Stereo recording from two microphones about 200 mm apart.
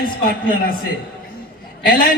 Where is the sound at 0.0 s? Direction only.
45° left (ahead or behind).